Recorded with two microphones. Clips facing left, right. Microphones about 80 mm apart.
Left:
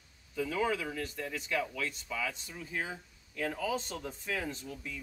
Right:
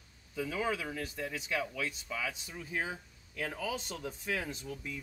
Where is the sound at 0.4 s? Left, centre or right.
Centre.